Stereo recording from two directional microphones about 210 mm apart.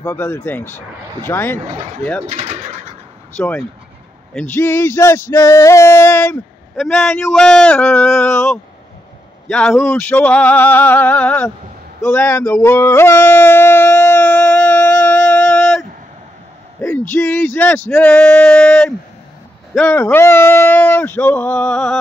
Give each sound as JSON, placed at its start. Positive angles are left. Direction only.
{"t": 0.0, "sound": "speech", "side_deg": 10}
{"t": 2.2, "sound": "mechanisms", "side_deg": -25}
{"t": 3.3, "sound": "speech", "side_deg": 10}
{"t": 12.0, "sound": "a sound", "side_deg": 10}
{"t": 17.1, "sound": "speech", "side_deg": 10}